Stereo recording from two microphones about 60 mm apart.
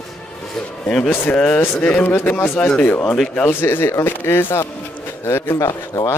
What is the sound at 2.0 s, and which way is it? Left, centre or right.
Speech, left.